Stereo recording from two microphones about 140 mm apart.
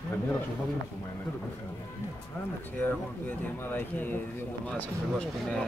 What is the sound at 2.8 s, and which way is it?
Speech, 15° left (ahead or behind).